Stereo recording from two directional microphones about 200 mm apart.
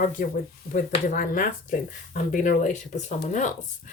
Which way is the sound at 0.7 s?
45° left (ahead or behind).